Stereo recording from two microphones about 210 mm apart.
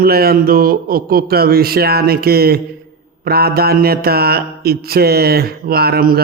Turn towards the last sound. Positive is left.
turn(degrees=-45)  # may be behind; listen again after turning